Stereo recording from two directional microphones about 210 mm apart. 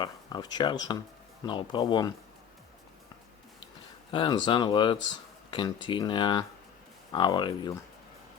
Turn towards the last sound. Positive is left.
turn(degrees=20)  # may be behind; listen again after turning